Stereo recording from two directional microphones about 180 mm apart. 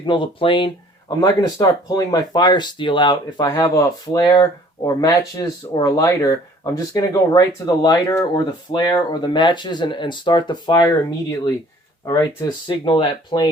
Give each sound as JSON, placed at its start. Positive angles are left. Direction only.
{"t": 0.0, "sound": "speech", "side_deg": 25}